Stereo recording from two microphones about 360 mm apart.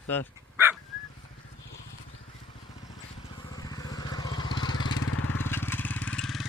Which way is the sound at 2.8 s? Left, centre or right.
Centre.